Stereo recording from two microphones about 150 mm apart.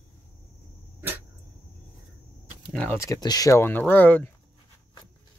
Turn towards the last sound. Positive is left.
turn(degrees=10)  # may be behind; listen again after turning